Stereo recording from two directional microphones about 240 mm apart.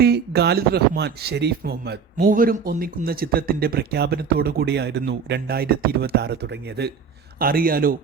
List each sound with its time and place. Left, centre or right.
0.0 s speech: right